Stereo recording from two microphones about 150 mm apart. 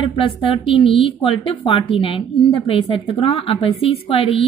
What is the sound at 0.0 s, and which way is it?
Speech, 35° left (ahead or behind).